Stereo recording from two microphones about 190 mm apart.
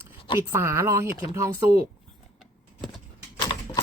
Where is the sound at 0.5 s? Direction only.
15° right (ahead or behind).